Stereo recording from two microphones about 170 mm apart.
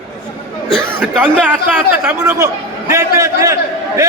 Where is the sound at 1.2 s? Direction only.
10° right (ahead or behind).